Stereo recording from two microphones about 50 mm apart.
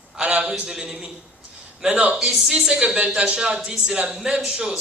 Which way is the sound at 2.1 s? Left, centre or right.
Centre.